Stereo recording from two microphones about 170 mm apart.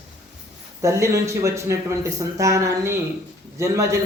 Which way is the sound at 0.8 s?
15° right (ahead or behind).